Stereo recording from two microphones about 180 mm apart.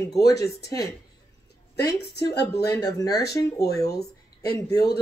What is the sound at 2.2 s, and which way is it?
Speech, 70° left (ahead or behind).